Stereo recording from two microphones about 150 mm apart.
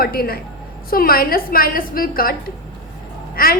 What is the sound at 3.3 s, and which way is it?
Speech, 80° left.